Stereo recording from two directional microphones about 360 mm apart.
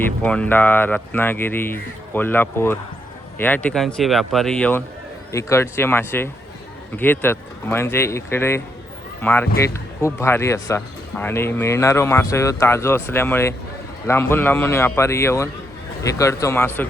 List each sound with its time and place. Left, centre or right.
0.2 s speech: centre